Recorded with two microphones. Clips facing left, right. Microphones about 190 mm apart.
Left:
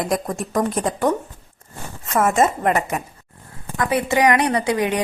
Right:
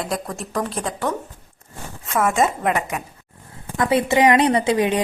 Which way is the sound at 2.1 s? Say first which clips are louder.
Left 2 dB; 5° left (ahead or behind).